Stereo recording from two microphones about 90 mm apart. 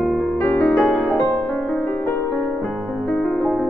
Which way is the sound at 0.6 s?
5° left (ahead or behind).